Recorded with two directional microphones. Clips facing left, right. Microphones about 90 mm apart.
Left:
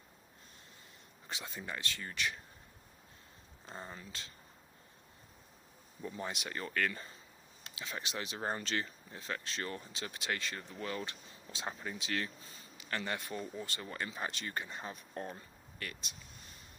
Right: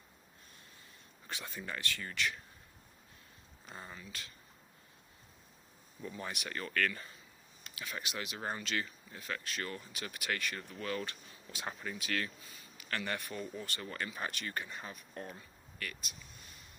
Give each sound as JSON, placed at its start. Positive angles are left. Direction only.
{"t": 1.3, "sound": "speech", "side_deg": 20}
{"t": 3.7, "sound": "speech", "side_deg": 25}
{"t": 6.0, "sound": "speech", "side_deg": 25}